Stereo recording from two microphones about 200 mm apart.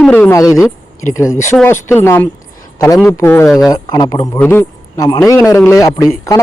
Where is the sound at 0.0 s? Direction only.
10° left (ahead or behind).